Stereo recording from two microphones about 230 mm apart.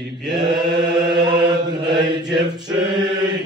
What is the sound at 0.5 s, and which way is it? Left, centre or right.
Chant, centre.